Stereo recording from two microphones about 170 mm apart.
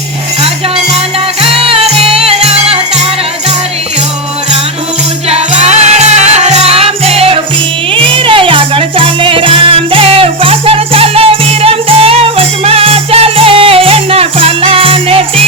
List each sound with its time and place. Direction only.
1.4 s music: 35° right (ahead or behind)
5.3 s music: 40° right (ahead or behind)